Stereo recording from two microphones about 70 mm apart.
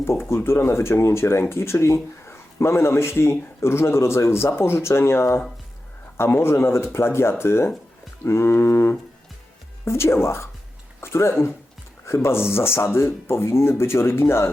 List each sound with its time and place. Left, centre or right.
0.0 s speech: left